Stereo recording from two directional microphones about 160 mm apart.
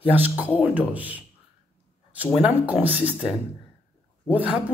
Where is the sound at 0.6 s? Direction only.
10° right (ahead or behind).